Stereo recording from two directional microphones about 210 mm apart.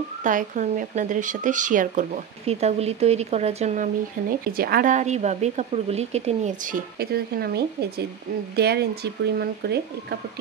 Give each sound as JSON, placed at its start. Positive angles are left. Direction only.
{"t": 0.2, "sound": "speech", "side_deg": -40}
{"t": 4.5, "sound": "speech", "side_deg": -45}